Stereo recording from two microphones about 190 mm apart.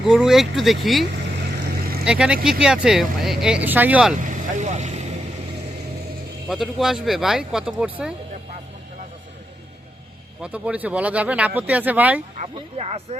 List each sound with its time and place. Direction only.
0.0 s speech: centre (ahead or behind)
2.0 s speech: 5° right (ahead or behind)
4.4 s vehicle: 40° right (ahead or behind)
6.5 s speech: centre (ahead or behind)
10.4 s speech: 5° right (ahead or behind)
12.5 s speech: 30° right (ahead or behind)